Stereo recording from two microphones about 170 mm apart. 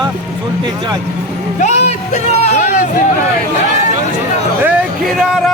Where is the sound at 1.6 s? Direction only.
45° left (ahead or behind).